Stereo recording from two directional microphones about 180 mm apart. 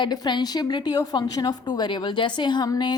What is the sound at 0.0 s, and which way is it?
A woman's voice, 25° left (ahead or behind).